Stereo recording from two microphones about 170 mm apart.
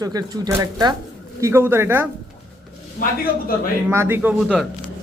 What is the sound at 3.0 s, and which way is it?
Speech, 55° left (ahead or behind).